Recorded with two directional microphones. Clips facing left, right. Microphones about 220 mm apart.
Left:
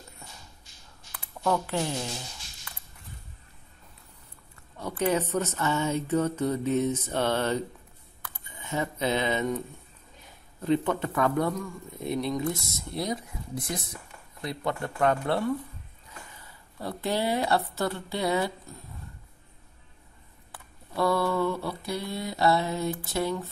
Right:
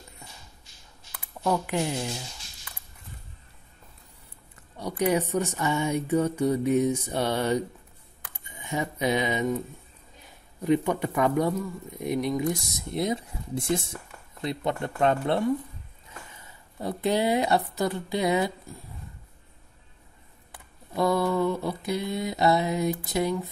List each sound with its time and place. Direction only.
1.1 s a sound: 10° right (ahead or behind)
4.7 s speech: 15° right (ahead or behind)
10.6 s speech: 15° right (ahead or behind)
16.7 s speech: 20° right (ahead or behind)
20.9 s speech: 20° right (ahead or behind)